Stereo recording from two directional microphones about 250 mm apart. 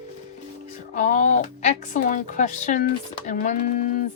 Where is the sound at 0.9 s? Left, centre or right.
Left.